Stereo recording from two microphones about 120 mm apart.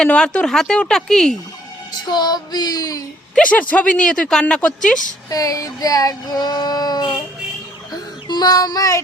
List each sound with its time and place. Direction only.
0.0 s speech: 10° left (ahead or behind)
1.9 s child singing: 35° left (ahead or behind)
3.3 s speech: 10° left (ahead or behind)
5.3 s child singing: 30° left (ahead or behind)
8.3 s child singing: 35° left (ahead or behind)